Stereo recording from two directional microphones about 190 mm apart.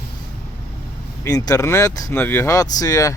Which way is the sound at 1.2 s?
15° left (ahead or behind).